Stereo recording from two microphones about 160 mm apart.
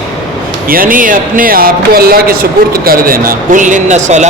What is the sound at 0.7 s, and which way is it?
Speech, 60° right (ahead or behind).